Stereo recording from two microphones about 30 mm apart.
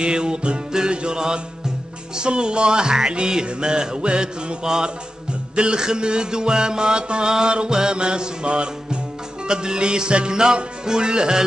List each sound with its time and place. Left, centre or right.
0.0 s music: right
4.6 s music: right
5.6 s music: right